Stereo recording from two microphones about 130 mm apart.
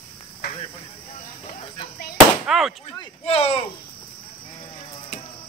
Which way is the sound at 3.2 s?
50° left (ahead or behind).